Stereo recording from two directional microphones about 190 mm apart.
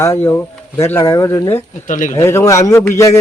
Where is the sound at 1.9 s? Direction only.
40° left (ahead or behind).